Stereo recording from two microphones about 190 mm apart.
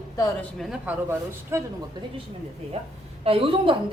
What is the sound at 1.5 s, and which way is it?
Speech, 15° right (ahead or behind).